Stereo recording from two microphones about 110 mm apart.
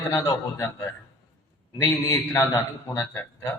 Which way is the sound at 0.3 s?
25° left (ahead or behind).